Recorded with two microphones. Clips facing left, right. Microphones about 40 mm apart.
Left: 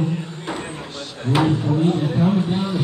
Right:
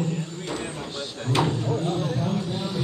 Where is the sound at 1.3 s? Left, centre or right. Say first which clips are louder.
Left 6 dB; left.